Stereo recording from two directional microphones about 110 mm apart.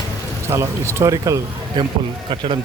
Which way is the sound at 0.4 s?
25° right (ahead or behind).